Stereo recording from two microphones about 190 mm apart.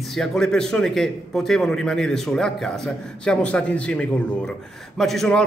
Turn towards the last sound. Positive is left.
turn(degrees=5)  # may be behind; listen again after turning